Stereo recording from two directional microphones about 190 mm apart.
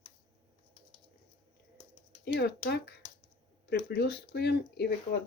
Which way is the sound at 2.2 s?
60° left (ahead or behind).